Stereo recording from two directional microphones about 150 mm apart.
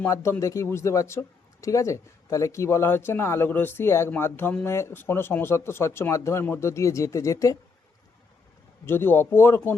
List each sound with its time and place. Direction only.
0.0 s speech: 15° left (ahead or behind)
8.9 s speech: 15° left (ahead or behind)